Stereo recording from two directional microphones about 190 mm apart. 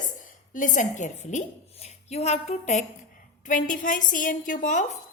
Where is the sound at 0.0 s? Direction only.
45° left (ahead or behind).